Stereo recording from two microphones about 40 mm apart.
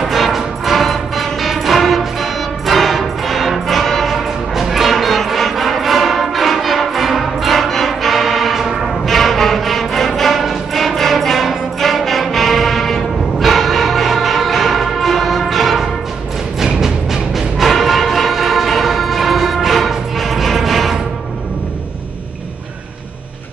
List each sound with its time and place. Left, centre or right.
0.0 s music: centre
9.0 s music: centre